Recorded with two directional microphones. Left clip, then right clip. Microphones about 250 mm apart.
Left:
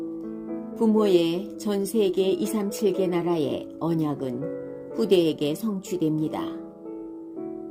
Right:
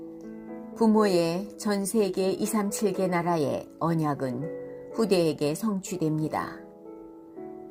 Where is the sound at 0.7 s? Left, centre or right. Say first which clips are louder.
Left 2 dB; centre.